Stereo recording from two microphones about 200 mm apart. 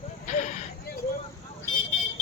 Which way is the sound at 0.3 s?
35° left (ahead or behind).